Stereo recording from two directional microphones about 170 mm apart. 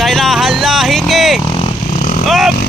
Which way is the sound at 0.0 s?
Centre (ahead or behind).